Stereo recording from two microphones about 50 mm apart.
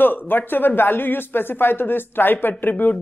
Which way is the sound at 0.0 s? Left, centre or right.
Left.